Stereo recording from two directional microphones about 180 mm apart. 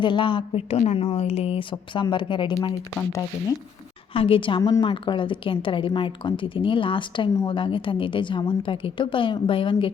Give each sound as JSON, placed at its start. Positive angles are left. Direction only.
{"t": 0.0, "sound": "a woman's voice", "side_deg": 25}
{"t": 4.1, "sound": "a woman's voice", "side_deg": 30}